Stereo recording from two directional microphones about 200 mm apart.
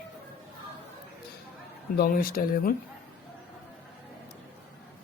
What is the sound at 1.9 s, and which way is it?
Speech, 50° left (ahead or behind).